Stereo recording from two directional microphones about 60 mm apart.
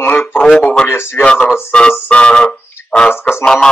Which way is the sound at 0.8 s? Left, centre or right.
Left.